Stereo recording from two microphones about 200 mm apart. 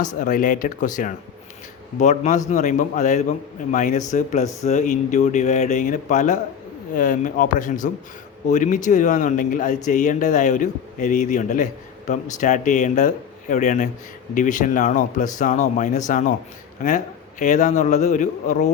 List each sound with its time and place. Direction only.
0.2 s speech: 40° left (ahead or behind)
17.4 s speech: 35° left (ahead or behind)